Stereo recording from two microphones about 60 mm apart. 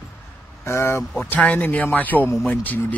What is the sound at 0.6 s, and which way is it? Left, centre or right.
Speech, left.